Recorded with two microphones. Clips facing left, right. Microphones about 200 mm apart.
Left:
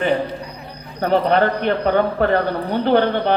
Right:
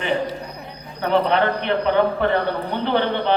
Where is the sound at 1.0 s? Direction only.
45° left (ahead or behind).